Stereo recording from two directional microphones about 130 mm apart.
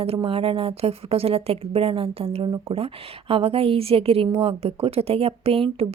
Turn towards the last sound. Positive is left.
turn(degrees=-45)  # may be behind; listen again after turning